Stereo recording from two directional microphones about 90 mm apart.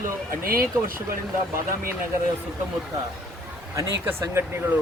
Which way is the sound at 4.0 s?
25° right (ahead or behind).